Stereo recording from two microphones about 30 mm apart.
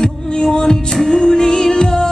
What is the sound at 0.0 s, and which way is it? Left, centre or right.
Heart sounds, left.